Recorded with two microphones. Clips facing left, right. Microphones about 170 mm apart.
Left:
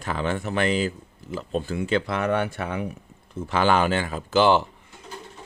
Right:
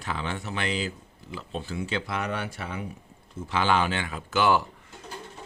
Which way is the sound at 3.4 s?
50° left (ahead or behind).